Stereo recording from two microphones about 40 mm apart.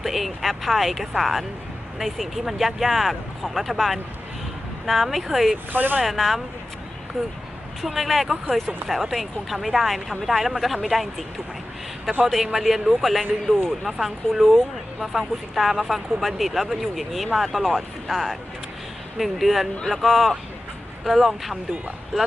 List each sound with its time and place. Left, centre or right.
0.0 s speech: centre
5.7 s speech: right
6.0 s speech: centre
12.5 s speech: centre
22.1 s speech: centre